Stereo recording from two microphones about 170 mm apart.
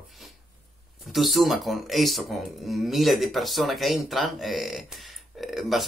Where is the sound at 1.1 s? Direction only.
Centre (ahead or behind).